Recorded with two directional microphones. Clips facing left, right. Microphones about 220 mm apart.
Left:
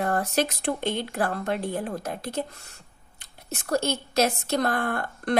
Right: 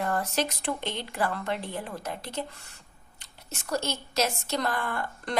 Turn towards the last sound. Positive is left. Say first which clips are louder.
# left 6 dB
turn(degrees=55)  # may be behind; listen again after turning